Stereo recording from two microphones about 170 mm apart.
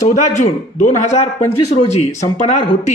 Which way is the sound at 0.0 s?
45° left (ahead or behind).